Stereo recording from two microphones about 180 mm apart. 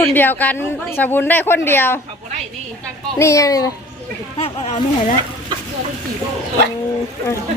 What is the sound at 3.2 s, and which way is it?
Speech, 15° left (ahead or behind).